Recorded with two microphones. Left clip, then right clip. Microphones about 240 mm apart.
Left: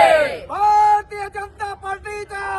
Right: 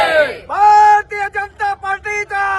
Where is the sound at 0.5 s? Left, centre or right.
Right.